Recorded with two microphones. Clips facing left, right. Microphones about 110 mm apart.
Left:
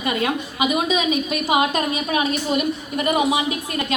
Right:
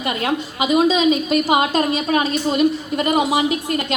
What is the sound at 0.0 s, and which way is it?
A woman's voice, 30° right (ahead or behind).